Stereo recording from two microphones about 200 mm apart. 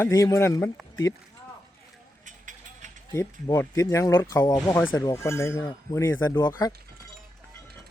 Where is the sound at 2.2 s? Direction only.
40° right (ahead or behind).